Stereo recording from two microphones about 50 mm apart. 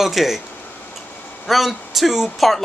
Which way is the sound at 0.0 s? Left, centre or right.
Centre.